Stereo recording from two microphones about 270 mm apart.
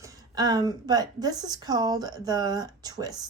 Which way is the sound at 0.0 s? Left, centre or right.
Centre.